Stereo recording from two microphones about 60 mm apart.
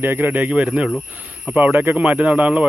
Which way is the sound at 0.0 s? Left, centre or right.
Right.